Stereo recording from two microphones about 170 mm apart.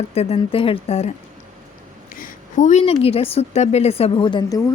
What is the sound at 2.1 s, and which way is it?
A woman's voice, 50° left (ahead or behind).